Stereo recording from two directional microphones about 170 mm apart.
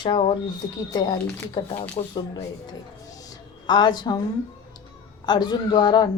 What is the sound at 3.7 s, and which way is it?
Speech, 25° left (ahead or behind).